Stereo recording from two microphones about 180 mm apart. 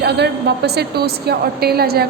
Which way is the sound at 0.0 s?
65° right (ahead or behind).